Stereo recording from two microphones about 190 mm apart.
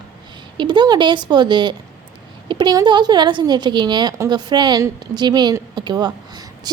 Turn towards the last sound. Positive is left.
turn(degrees=-20)  # may be behind; listen again after turning